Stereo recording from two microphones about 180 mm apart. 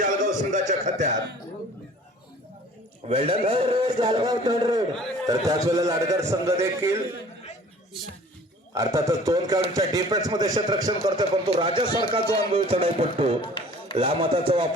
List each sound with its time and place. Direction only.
0.0 s a sound: 45° right (ahead or behind)
1.1 s speech: 70° right (ahead or behind)
3.1 s a man's voice: 30° right (ahead or behind); by 6.9 s 15° right (ahead or behind)
8.7 s a man's voice: 20° right (ahead or behind)
13.4 s a sound: 25° left (ahead or behind)
13.9 s a man's voice: 30° right (ahead or behind)